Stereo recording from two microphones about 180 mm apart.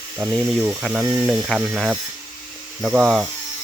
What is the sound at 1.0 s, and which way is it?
Speech, 10° right (ahead or behind).